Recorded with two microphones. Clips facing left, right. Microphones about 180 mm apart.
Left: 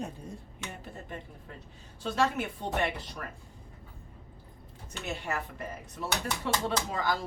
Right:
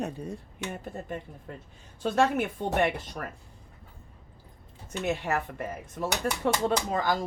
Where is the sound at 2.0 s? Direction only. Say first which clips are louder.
Right 4 dB; 55° right (ahead or behind).